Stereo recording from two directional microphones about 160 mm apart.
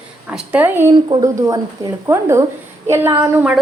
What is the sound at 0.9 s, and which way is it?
A woman's voice, 25° right (ahead or behind).